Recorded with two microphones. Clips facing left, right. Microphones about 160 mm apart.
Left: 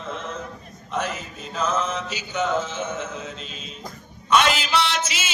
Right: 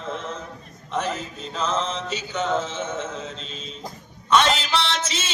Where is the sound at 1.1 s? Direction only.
30° right (ahead or behind).